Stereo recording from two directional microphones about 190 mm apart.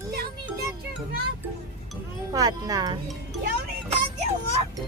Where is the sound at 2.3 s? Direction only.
20° right (ahead or behind).